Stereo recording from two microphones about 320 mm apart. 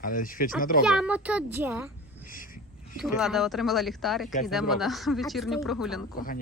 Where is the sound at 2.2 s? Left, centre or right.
Left.